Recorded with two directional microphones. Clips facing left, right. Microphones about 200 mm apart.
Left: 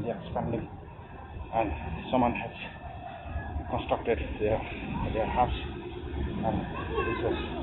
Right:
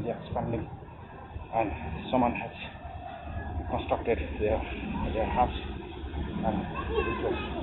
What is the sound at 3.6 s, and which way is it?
Speech, centre (ahead or behind).